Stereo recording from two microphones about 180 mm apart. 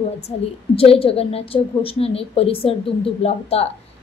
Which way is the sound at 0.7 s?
30° left (ahead or behind).